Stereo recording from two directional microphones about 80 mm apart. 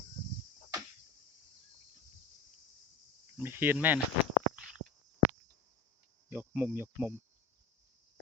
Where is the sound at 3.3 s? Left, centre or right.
Right.